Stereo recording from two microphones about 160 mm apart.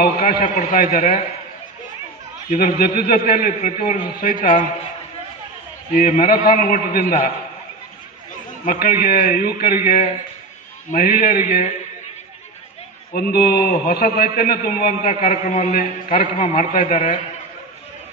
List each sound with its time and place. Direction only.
0.0 s a man's voice: 65° left (ahead or behind)
2.5 s a man's voice: 65° left (ahead or behind)
5.9 s a man's voice: 60° left (ahead or behind)
8.6 s a man's voice: 65° left (ahead or behind)
13.1 s a man's voice: 70° left (ahead or behind); by 17.2 s 55° left (ahead or behind)